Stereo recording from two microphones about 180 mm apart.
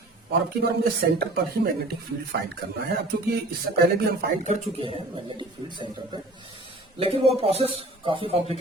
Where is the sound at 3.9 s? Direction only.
55° right (ahead or behind).